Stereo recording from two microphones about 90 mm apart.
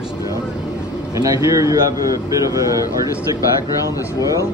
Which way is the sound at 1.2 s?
40° right (ahead or behind).